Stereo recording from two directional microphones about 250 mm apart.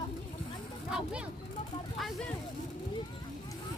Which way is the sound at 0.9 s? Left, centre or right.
Centre.